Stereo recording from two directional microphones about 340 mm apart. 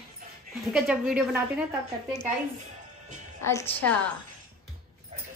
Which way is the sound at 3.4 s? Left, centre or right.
Centre.